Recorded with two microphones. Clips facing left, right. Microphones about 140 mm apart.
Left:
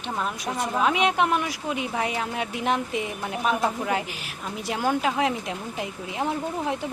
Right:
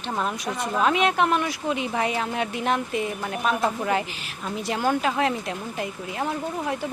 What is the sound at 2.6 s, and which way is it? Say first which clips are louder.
Speech: left 1 dB; 15° left (ahead or behind).